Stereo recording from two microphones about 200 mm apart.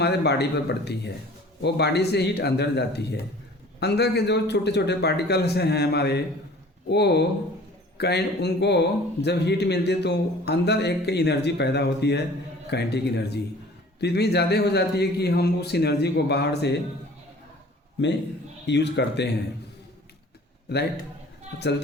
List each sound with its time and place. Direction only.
0.0 s a man's voice: 55° left (ahead or behind)
18.6 s a man's voice: 60° left (ahead or behind)